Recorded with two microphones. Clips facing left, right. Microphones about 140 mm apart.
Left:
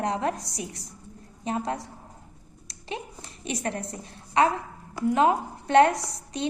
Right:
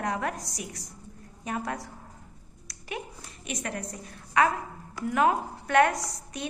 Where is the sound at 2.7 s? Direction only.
25° left (ahead or behind).